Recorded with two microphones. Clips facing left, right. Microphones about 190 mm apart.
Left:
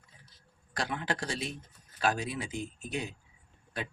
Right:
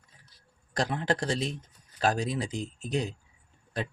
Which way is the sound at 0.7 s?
35° right (ahead or behind).